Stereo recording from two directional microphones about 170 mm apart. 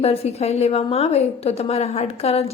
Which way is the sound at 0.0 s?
35° left (ahead or behind).